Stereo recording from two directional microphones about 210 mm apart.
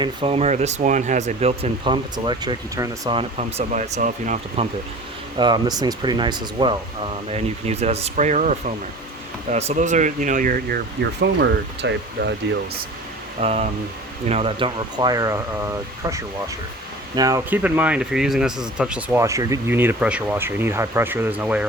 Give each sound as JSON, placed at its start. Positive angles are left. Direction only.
{"t": 0.0, "sound": "speech", "side_deg": -25}
{"t": 5.4, "sound": "speech", "side_deg": -20}
{"t": 11.2, "sound": "speech", "side_deg": -55}
{"t": 13.4, "sound": "speech", "side_deg": -30}